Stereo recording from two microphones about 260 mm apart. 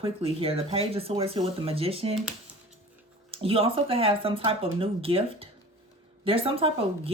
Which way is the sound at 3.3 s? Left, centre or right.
Right.